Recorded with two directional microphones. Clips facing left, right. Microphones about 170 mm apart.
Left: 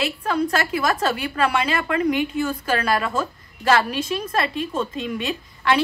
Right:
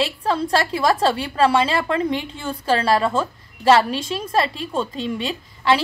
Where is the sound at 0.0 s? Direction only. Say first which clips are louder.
Right 1 dB; 30° right (ahead or behind).